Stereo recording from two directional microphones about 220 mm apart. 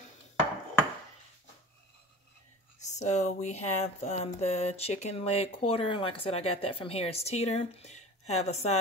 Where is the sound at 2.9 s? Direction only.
30° left (ahead or behind).